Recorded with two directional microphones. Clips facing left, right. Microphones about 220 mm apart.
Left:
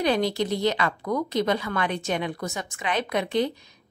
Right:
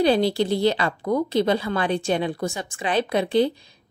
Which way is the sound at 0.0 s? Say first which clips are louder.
Right 4 dB; 30° right (ahead or behind).